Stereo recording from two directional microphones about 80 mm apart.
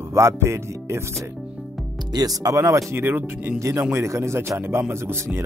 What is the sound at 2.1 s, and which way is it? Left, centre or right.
Speech, right.